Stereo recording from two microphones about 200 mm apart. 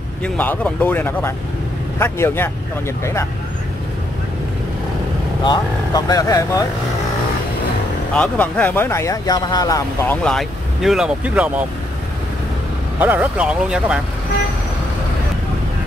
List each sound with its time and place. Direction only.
0.2 s speech: 5° left (ahead or behind)
5.4 s speech: 20° left (ahead or behind)
8.1 s speech: 5° left (ahead or behind)
10.2 s speech: centre (ahead or behind)
13.0 s speech: 10° right (ahead or behind)